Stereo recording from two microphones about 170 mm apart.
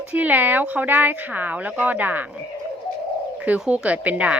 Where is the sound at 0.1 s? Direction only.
10° right (ahead or behind).